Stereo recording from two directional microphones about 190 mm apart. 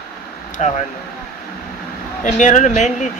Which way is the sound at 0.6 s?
40° left (ahead or behind).